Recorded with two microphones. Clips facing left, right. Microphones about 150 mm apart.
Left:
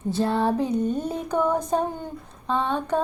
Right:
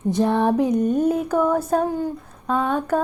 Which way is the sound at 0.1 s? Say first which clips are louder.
Right 4 dB; 15° right (ahead or behind).